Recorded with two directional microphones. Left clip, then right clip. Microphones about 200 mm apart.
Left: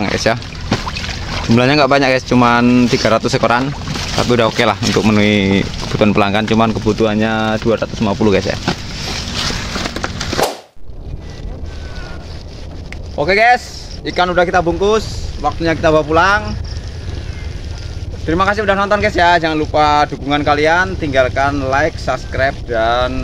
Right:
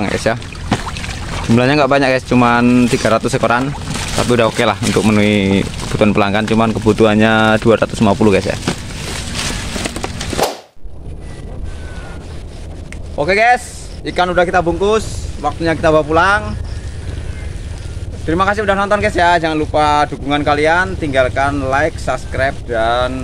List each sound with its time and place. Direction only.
0.0 s boat: centre (ahead or behind)
1.4 s speech: centre (ahead or behind)
6.8 s speech: 20° right (ahead or behind)
8.2 s speech: 5° right (ahead or behind)
10.0 s a sound: centre (ahead or behind)
13.2 s speech: centre (ahead or behind)
18.2 s speech: centre (ahead or behind)